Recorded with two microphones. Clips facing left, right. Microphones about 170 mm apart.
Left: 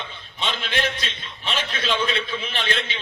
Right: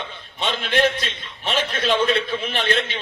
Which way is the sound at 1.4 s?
50° right (ahead or behind).